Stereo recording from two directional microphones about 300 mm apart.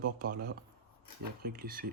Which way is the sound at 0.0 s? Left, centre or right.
Right.